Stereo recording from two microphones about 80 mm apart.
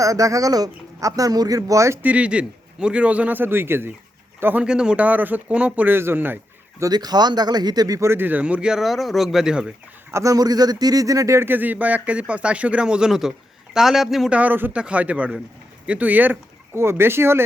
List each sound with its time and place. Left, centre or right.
0.0 s a man's voice: right
2.0 s speech: centre
4.6 s speech: centre
6.9 s speech: right
7.9 s speech: right; by 9.7 s centre
10.1 s a man's voice: right
10.3 s a man's voice: right; by 14.3 s centre
14.3 s speech: centre